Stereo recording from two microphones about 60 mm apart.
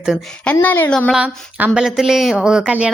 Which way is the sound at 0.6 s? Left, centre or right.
Left.